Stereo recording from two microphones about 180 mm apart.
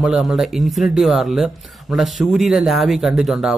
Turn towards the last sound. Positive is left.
turn(degrees=0)  # may be behind; listen again after turning